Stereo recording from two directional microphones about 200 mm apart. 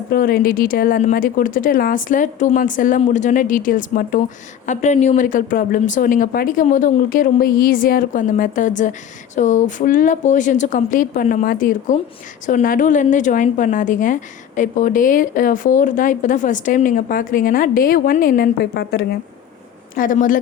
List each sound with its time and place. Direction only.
0.1 s speech: 50° left (ahead or behind)
20.0 s speech: 40° left (ahead or behind)